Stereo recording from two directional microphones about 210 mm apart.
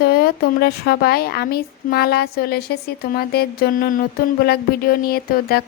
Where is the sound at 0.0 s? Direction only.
45° left (ahead or behind).